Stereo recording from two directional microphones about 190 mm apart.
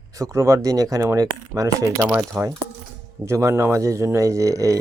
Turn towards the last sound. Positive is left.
turn(degrees=-15)  # may be behind; listen again after turning